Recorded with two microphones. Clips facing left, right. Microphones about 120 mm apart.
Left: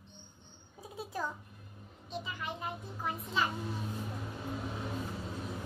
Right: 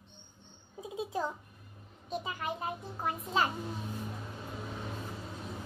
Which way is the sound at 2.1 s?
45° right (ahead or behind).